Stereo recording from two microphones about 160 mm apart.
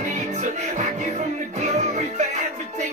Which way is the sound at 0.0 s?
50° right (ahead or behind).